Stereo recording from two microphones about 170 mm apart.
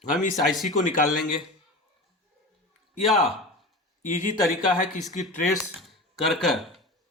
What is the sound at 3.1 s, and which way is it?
Speech, centre (ahead or behind).